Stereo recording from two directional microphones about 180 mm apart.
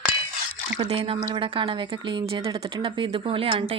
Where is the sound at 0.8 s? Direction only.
30° right (ahead or behind).